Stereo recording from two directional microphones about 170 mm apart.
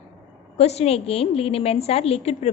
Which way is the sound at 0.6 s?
40° left (ahead or behind).